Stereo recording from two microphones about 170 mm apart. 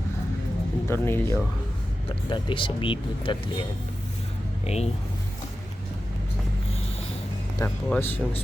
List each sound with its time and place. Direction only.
0.9 s speech: 15° left (ahead or behind)
2.0 s speech: 30° left (ahead or behind)
4.6 s speech: 40° left (ahead or behind)
7.9 s speech: 10° left (ahead or behind)